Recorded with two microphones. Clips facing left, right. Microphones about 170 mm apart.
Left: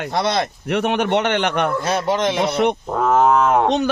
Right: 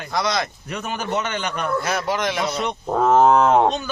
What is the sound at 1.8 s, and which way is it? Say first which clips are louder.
Speech: left 4 dB; 25° left (ahead or behind).